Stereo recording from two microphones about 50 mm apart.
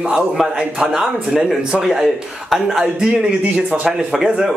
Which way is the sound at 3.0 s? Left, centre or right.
Right.